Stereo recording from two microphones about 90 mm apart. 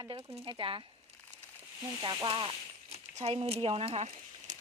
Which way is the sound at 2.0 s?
70° right (ahead or behind).